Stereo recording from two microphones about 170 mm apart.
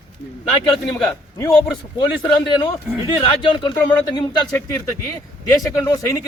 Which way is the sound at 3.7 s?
10° left (ahead or behind).